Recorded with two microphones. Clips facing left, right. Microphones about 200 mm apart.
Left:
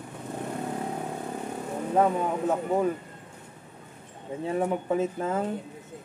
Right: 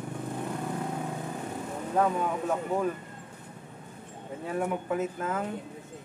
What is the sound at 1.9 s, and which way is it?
Speech, 20° left (ahead or behind).